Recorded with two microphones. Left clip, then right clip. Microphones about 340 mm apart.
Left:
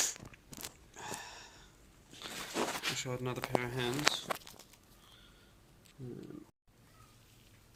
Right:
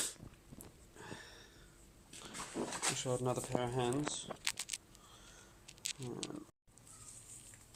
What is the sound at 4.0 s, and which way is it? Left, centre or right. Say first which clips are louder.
Speech: left 9 dB; left.